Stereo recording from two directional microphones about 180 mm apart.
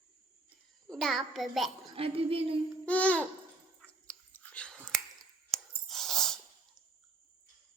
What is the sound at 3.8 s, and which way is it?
Whispering, 5° left (ahead or behind).